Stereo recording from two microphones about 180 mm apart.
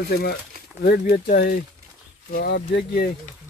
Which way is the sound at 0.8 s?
60° left (ahead or behind).